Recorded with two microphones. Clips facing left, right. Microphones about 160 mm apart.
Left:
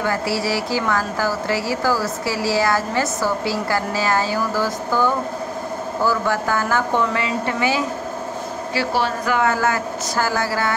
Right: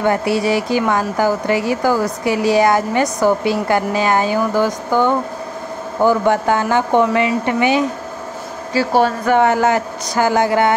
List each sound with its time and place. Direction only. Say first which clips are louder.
0.0 s a woman's voice: right 6 dB; 20° right (ahead or behind)
8.7 s speech: right 7 dB; 50° right (ahead or behind)
9.3 s a woman's voice: right 5 dB; 20° right (ahead or behind)